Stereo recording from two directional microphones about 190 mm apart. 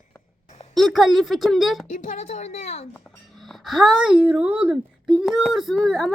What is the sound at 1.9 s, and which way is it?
Speech, 40° left (ahead or behind).